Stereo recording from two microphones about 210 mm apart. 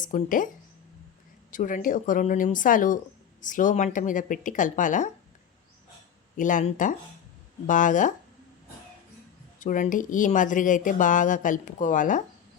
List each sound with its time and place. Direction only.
0.0 s speech: 40° left (ahead or behind)
1.5 s speech: 40° left (ahead or behind)
6.3 s speech: 40° left (ahead or behind)
9.6 s speech: 35° left (ahead or behind)